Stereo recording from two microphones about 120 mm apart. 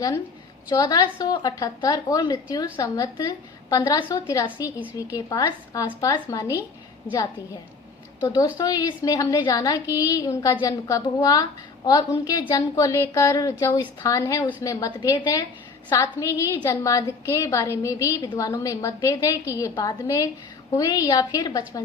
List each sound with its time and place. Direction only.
0.7 s a woman's voice: 35° left (ahead or behind)
8.2 s a woman's voice: 30° left (ahead or behind)